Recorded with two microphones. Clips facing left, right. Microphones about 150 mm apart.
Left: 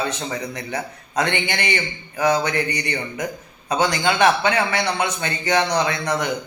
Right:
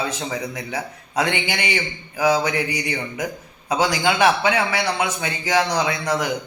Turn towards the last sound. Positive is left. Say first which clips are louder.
# even
turn(degrees=-5)  # may be behind; listen again after turning